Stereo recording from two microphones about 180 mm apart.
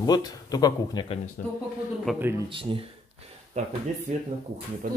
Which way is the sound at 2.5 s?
30° right (ahead or behind).